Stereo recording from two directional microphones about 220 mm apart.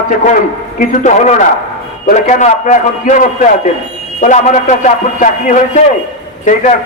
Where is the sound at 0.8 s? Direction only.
35° left (ahead or behind).